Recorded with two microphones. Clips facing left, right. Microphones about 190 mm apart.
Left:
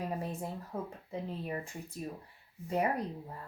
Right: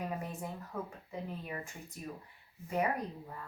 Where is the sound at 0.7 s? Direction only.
25° left (ahead or behind).